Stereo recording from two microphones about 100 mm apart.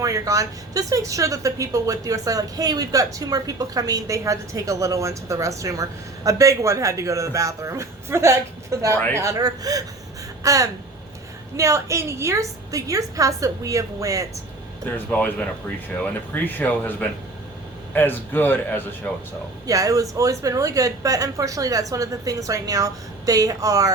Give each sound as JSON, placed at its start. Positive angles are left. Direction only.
{"t": 0.0, "sound": "speech", "side_deg": -35}
{"t": 14.9, "sound": "a man's voice", "side_deg": 15}
{"t": 19.6, "sound": "speech", "side_deg": -35}